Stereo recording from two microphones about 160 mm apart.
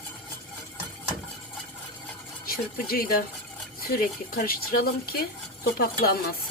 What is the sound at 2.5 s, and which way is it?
Speech, 70° left (ahead or behind).